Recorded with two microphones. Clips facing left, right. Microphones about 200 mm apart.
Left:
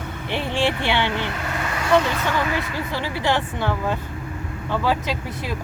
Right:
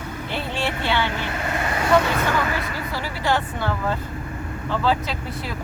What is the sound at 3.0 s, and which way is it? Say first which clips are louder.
Speech: even; 20° left (ahead or behind).